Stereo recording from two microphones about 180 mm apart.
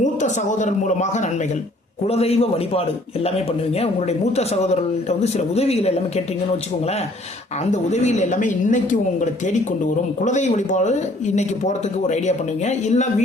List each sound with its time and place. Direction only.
0.0 s a man's voice: 45° left (ahead or behind)
7.6 s a man's voice: 40° left (ahead or behind)